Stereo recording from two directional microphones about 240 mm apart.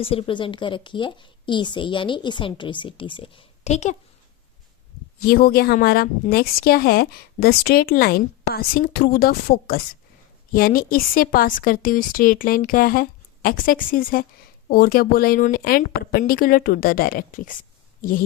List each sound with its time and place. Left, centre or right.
0.0 s a woman's voice: left
5.2 s a woman's voice: left